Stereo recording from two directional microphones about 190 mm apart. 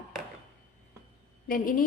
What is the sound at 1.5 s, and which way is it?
Speech, 50° left (ahead or behind).